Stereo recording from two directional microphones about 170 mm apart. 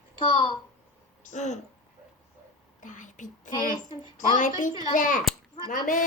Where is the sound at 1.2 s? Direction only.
45° left (ahead or behind).